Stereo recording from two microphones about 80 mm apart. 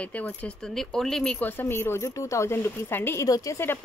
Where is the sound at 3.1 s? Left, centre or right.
Left.